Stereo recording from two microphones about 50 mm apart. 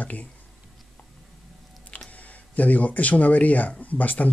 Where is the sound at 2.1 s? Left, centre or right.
Left.